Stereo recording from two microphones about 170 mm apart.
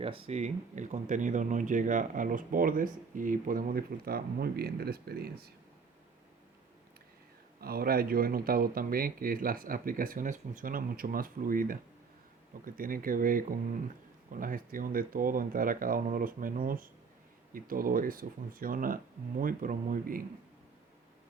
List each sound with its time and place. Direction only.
0.0 s speech: 35° right (ahead or behind); by 5.5 s 65° right (ahead or behind)
7.6 s speech: 60° right (ahead or behind)